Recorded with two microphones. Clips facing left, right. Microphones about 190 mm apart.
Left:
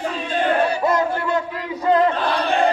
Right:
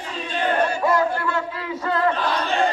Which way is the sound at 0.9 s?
20° left (ahead or behind).